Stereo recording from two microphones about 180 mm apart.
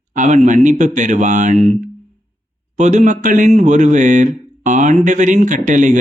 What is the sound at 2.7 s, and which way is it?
Speech, 40° right (ahead or behind).